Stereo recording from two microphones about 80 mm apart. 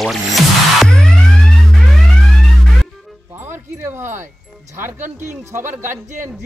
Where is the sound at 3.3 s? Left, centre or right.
Right.